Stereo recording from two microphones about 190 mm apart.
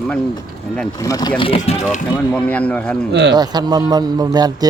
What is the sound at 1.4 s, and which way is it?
Speech, 30° left (ahead or behind).